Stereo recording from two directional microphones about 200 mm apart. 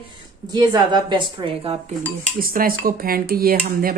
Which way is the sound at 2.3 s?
45° right (ahead or behind).